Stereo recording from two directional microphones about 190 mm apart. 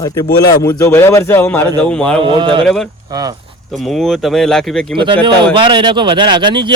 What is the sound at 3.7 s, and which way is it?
A man's voice, centre (ahead or behind).